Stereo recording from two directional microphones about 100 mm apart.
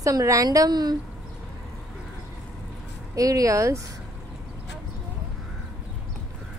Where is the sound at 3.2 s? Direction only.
35° right (ahead or behind).